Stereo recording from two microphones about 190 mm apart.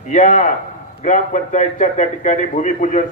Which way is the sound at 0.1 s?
40° left (ahead or behind).